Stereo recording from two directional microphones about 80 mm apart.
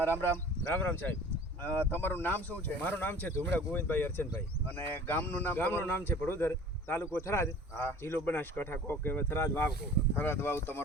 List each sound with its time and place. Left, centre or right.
0.2 s a man's voice: left